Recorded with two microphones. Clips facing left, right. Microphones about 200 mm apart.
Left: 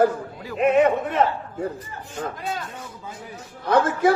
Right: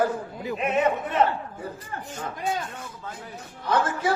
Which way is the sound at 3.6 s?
55° left (ahead or behind).